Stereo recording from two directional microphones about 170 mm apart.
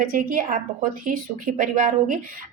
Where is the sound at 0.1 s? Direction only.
55° right (ahead or behind).